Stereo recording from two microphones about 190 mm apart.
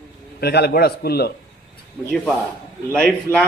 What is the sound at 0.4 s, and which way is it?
Speech, 55° left (ahead or behind).